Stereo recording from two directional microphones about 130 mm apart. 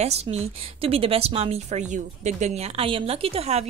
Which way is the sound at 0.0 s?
55° right (ahead or behind).